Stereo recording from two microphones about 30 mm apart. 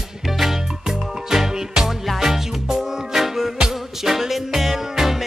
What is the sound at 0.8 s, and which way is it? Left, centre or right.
Music, centre.